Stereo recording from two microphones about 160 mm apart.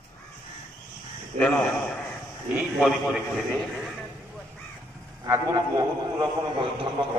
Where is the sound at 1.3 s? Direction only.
40° right (ahead or behind).